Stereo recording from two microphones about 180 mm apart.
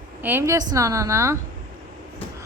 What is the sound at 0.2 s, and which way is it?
A woman's voice, 10° right (ahead or behind).